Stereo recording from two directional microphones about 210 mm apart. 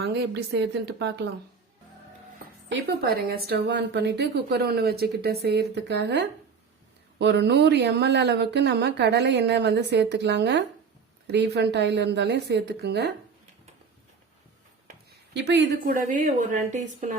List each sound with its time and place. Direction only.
0.0 s speech: 55° right (ahead or behind)
2.6 s speech: 50° right (ahead or behind)
14.8 s speech: 55° right (ahead or behind); by 17.2 s 35° right (ahead or behind)